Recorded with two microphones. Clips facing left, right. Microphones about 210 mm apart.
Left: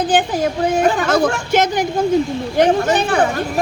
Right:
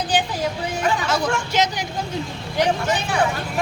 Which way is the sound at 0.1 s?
50° left (ahead or behind).